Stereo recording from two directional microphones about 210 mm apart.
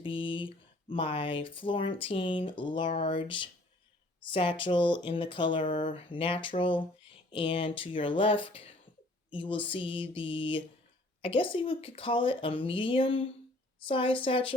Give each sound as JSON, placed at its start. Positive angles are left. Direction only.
{"t": 0.0, "sound": "speech", "side_deg": 25}